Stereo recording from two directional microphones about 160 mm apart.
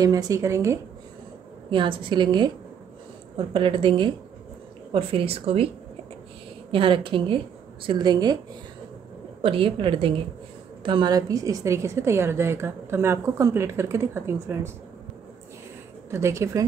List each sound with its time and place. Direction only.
0.0 s a woman's voice: 25° right (ahead or behind)
1.7 s a woman's voice: 30° right (ahead or behind)
6.7 s a woman's voice: 35° right (ahead or behind)
9.4 s a woman's voice: 35° right (ahead or behind); by 14.7 s 15° right (ahead or behind)
16.1 s a woman's voice: 15° right (ahead or behind)